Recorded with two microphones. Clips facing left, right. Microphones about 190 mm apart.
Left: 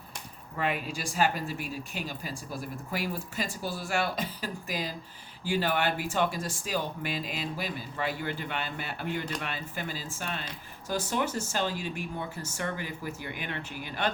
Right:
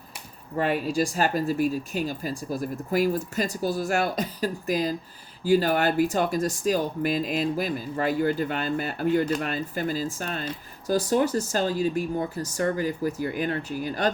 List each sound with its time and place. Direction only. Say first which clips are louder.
0.5 s speech: right 7 dB; 40° right (ahead or behind)